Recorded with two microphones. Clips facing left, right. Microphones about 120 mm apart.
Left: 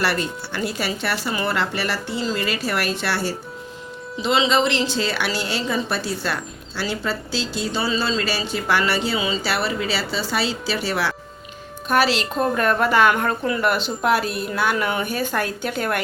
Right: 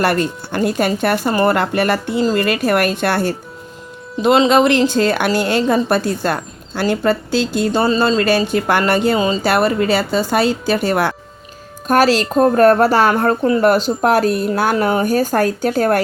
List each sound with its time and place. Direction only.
0.0 s a woman's voice: 50° right (ahead or behind)